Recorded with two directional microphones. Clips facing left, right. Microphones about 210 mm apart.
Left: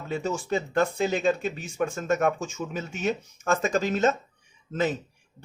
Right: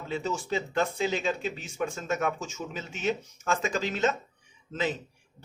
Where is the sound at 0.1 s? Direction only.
50° left (ahead or behind).